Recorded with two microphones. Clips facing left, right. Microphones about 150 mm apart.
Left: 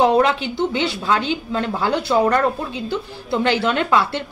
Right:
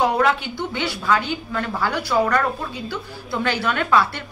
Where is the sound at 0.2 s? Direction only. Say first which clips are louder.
Left 3 dB; 20° left (ahead or behind).